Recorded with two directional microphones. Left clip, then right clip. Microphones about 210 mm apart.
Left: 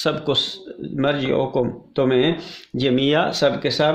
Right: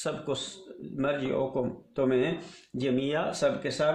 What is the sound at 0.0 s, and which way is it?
Speech, 40° left (ahead or behind).